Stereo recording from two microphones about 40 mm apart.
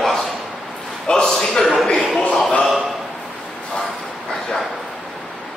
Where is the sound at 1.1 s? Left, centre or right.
Centre.